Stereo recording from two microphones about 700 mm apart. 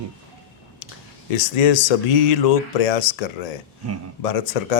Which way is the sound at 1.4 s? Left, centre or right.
Left.